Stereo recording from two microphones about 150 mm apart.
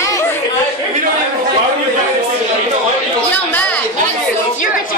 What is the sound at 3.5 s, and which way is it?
Speech, 10° left (ahead or behind).